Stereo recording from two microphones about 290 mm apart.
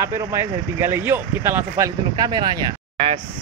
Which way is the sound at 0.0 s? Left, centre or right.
Centre.